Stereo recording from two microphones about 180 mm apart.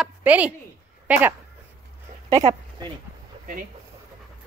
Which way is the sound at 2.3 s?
20° right (ahead or behind).